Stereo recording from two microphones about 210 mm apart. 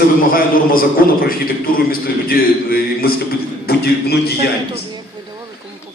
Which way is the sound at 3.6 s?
50° left (ahead or behind).